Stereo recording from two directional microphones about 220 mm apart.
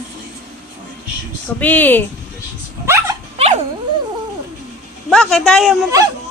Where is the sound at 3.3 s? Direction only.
30° right (ahead or behind).